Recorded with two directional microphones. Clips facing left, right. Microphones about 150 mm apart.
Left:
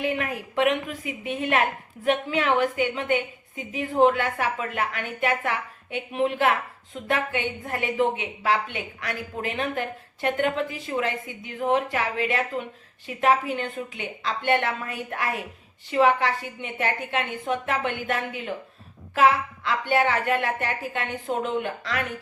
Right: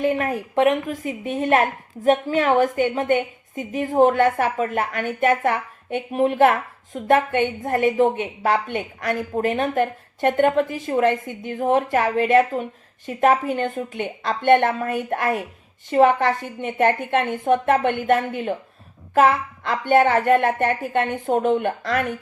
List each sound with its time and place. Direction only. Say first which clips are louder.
0.0 s a woman's voice: right 6 dB; 45° right (ahead or behind)